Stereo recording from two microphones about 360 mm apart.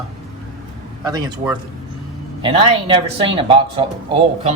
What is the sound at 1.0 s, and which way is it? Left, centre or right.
Speech, centre.